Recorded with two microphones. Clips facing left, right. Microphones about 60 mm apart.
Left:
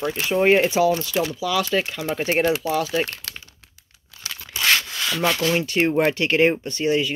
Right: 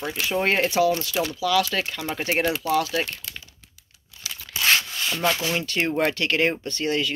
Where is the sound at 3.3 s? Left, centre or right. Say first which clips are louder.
Left 2 dB; left.